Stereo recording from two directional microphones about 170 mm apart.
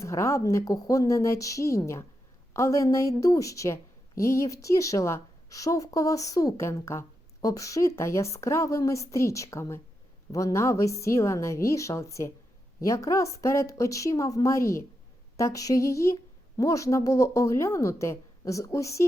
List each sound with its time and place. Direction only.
0.0 s a woman's voice: 15° left (ahead or behind)